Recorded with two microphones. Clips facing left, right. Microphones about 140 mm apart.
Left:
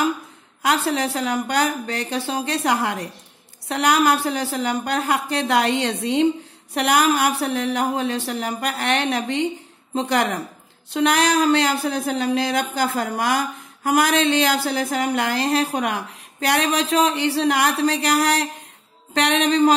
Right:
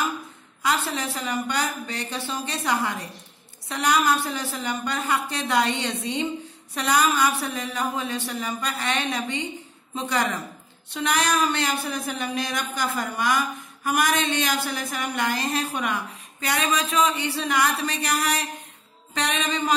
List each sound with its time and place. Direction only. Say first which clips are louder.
1.1 s speech: left 5 dB; 90° left
10.9 s speech: left 6 dB; 90° left